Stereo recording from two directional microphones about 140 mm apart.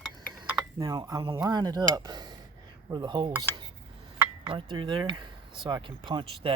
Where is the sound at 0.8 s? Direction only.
25° right (ahead or behind).